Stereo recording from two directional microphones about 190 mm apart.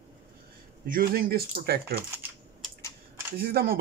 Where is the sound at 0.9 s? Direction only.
50° right (ahead or behind).